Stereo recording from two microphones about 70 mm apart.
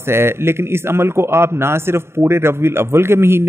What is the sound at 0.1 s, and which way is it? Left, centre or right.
A man's voice, right.